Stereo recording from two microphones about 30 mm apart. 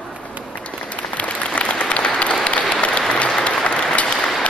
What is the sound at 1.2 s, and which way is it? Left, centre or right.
Applause, left.